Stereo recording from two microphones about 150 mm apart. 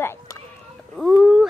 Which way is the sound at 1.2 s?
5° right (ahead or behind).